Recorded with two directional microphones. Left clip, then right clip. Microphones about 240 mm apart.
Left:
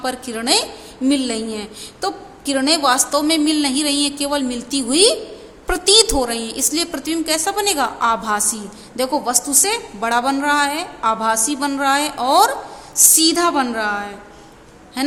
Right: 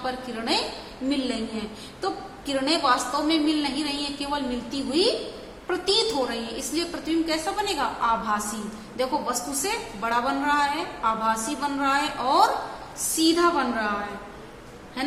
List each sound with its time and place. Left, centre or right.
0.0 s a woman's voice: left
15.0 s a woman's voice: left